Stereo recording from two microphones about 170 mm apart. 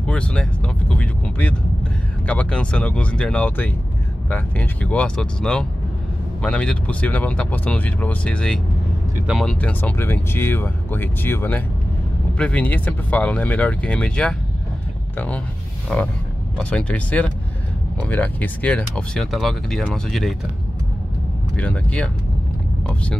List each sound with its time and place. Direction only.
0.0 s speech: 5° left (ahead or behind)
21.5 s speech: 10° left (ahead or behind)